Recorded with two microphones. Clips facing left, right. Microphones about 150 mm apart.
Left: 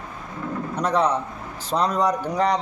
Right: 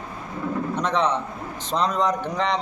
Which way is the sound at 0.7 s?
10° left (ahead or behind).